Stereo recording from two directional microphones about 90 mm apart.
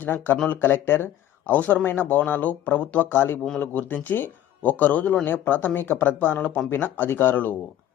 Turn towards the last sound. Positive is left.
turn(degrees=20)  # may be behind; listen again after turning